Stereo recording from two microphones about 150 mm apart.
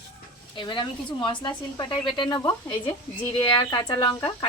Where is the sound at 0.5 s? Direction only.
30° left (ahead or behind).